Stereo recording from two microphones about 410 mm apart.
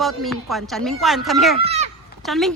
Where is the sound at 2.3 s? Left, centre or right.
Centre.